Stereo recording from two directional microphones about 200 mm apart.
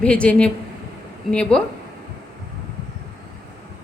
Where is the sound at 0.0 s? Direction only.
5° left (ahead or behind).